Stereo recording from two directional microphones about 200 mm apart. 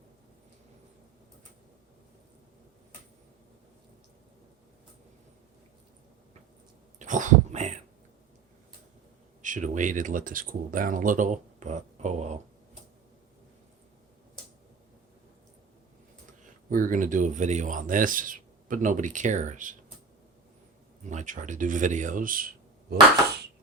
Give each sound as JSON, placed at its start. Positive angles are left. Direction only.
{"t": 7.0, "sound": "speech", "side_deg": -40}
{"t": 9.4, "sound": "speech", "side_deg": -40}
{"t": 16.6, "sound": "speech", "side_deg": -45}
{"t": 21.1, "sound": "speech", "side_deg": -40}